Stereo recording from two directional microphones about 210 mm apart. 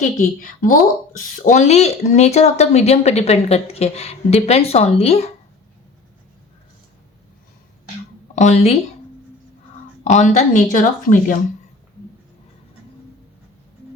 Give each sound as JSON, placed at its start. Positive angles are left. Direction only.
{"t": 0.0, "sound": "speech", "side_deg": 40}
{"t": 8.4, "sound": "speech", "side_deg": 30}
{"t": 10.0, "sound": "speech", "side_deg": 35}